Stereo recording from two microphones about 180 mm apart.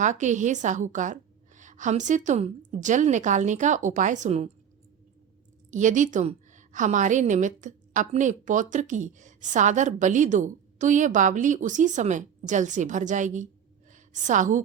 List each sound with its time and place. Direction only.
0.0 s a woman's voice: 45° right (ahead or behind)
5.7 s a woman's voice: 45° right (ahead or behind)